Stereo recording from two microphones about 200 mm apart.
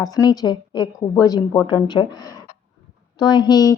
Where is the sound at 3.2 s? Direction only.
20° left (ahead or behind).